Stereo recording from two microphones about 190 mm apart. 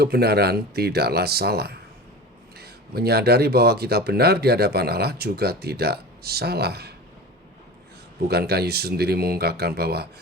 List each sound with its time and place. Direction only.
0.0 s speech: 55° right (ahead or behind)
8.3 s speech: 55° right (ahead or behind)